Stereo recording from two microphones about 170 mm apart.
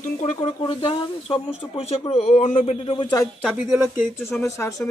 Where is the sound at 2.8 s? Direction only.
30° left (ahead or behind).